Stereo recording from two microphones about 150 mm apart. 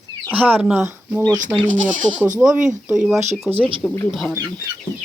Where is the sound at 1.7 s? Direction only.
60° right (ahead or behind).